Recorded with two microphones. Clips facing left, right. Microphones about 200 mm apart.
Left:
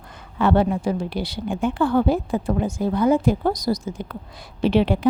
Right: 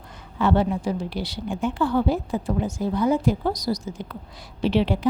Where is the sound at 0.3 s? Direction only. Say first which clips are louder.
Left 2 dB; 55° left (ahead or behind).